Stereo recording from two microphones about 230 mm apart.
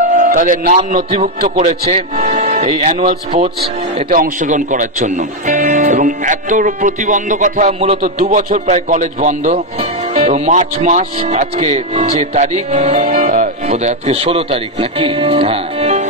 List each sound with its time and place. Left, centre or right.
0.2 s a man's voice: right